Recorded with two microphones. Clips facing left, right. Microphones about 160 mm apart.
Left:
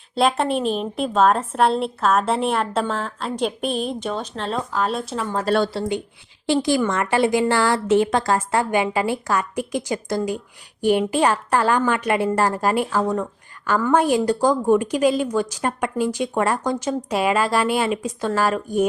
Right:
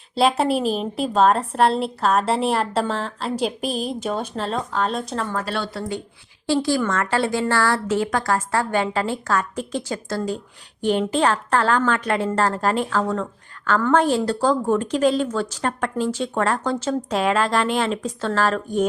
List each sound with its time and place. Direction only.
0.2 s a woman's voice: centre (ahead or behind)
4.4 s a woman's voice: 5° left (ahead or behind)
5.5 s speech: 45° left (ahead or behind)
6.5 s a woman's voice: 15° left (ahead or behind)